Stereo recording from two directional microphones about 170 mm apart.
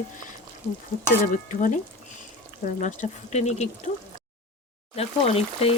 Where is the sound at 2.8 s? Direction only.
40° left (ahead or behind).